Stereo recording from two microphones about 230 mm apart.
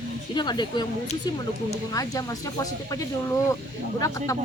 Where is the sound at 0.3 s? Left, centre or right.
Centre.